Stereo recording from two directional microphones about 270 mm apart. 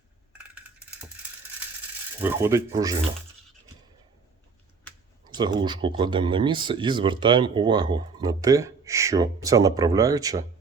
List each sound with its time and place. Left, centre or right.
2.2 s speech: centre
5.2 s speech: centre